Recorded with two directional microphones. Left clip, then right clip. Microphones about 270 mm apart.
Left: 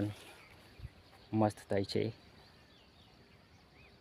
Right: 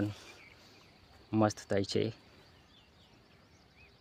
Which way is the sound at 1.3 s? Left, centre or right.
Centre.